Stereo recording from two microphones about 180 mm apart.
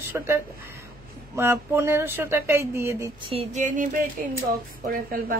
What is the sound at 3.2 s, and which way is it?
Speech, 35° right (ahead or behind).